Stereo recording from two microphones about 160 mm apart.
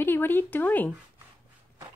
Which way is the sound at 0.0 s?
15° left (ahead or behind).